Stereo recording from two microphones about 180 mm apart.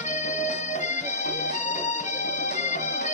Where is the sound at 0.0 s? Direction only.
40° left (ahead or behind).